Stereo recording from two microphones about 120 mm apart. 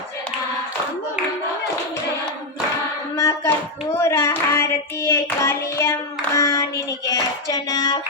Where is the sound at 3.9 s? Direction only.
20° left (ahead or behind).